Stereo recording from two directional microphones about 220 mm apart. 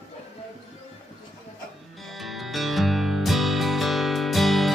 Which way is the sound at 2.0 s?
Centre (ahead or behind).